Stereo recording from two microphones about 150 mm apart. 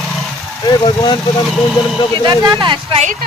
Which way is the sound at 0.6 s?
25° left (ahead or behind).